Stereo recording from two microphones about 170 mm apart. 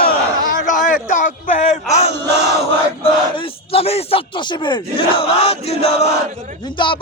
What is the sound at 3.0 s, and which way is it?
Speech, 30° left (ahead or behind).